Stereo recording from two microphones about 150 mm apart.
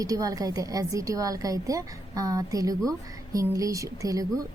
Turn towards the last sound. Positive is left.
turn(degrees=-20)  # may be behind; listen again after turning